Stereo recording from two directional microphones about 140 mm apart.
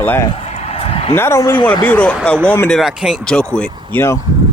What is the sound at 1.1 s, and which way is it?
Speech, 20° left (ahead or behind).